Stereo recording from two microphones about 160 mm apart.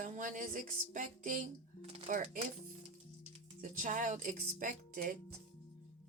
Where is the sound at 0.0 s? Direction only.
55° right (ahead or behind).